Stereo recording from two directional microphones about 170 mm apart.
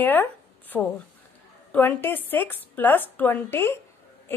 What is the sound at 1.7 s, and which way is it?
A woman's voice, 10° left (ahead or behind).